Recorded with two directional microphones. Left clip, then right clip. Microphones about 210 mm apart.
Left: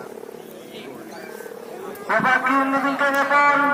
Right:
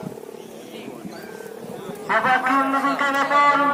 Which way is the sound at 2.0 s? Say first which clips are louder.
Even; 45° left (ahead or behind).